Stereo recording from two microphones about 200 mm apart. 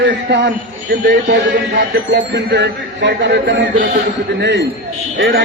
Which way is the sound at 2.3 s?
60° right (ahead or behind).